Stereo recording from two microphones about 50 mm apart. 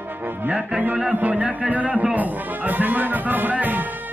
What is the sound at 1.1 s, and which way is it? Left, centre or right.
Music, right.